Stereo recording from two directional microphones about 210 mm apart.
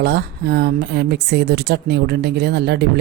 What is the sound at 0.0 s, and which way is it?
Speech, 50° right (ahead or behind).